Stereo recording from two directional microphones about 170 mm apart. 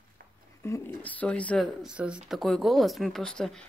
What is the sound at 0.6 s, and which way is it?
Speech, 15° left (ahead or behind).